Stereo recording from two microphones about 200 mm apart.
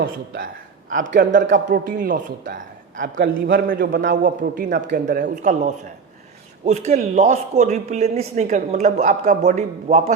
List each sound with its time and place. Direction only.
0.0 s a man's voice: 45° right (ahead or behind)
3.2 s a man's voice: 55° right (ahead or behind); by 10.2 s 35° right (ahead or behind)